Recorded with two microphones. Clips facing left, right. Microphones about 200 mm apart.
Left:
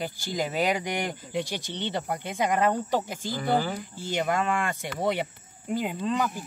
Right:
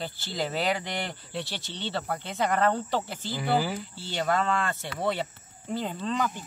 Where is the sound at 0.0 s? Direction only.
15° left (ahead or behind).